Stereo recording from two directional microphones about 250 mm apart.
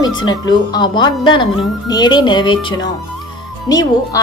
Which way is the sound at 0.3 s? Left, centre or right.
Centre.